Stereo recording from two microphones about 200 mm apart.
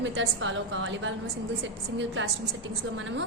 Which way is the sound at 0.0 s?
70° right (ahead or behind).